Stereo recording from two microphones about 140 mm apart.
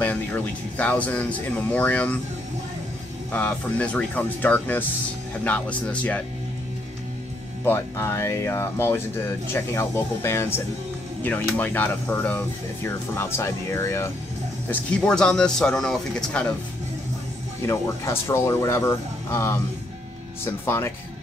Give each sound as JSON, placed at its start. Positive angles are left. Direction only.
{"t": 0.0, "sound": "speech", "side_deg": 10}
{"t": 3.3, "sound": "speech", "side_deg": 10}
{"t": 7.6, "sound": "speech", "side_deg": 15}
{"t": 14.7, "sound": "speech", "side_deg": 5}
{"t": 17.6, "sound": "speech", "side_deg": 20}